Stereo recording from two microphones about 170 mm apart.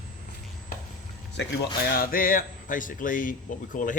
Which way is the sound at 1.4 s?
60° left (ahead or behind).